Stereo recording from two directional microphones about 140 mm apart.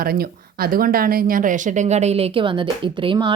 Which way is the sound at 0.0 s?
90° right.